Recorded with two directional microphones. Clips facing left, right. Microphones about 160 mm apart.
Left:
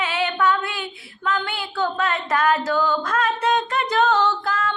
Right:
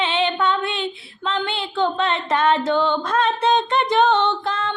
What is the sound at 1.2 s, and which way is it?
Singing, 25° right (ahead or behind).